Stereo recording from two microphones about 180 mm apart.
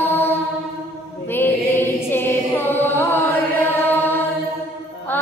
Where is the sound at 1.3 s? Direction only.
10° left (ahead or behind).